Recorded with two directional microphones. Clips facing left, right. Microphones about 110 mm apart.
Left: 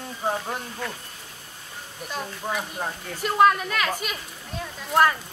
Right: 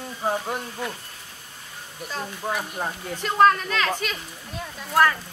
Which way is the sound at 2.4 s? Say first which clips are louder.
Right 2 dB; 5° right (ahead or behind).